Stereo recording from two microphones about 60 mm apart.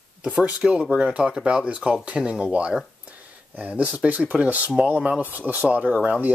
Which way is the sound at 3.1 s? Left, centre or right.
Right.